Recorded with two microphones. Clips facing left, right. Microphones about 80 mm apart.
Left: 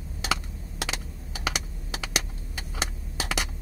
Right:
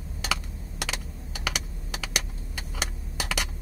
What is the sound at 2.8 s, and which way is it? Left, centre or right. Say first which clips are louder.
Keys jangling: left 1 dB; centre.